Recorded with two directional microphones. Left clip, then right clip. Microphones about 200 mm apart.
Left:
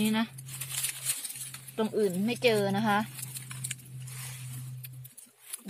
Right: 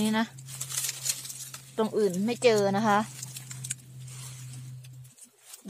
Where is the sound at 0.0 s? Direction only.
15° right (ahead or behind).